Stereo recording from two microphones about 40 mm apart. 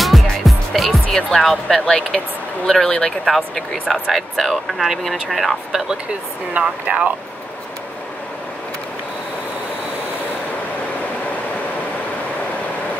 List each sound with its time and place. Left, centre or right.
0.0 s music: centre
1.7 s speech: centre
4.1 s speech: centre
6.6 s speech: right
6.9 s speech: right